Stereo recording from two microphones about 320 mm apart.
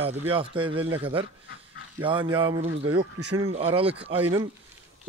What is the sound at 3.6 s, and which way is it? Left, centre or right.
Speech, centre.